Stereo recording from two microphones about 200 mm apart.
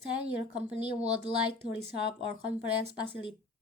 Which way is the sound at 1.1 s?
30° right (ahead or behind).